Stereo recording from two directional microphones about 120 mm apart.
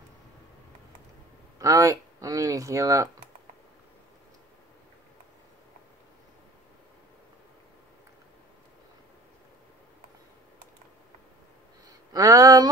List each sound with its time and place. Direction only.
1.6 s speech: 30° right (ahead or behind)
12.1 s speech: 30° right (ahead or behind)